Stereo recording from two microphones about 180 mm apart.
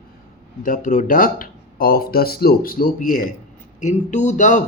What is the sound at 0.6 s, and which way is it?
Speech, 45° left (ahead or behind).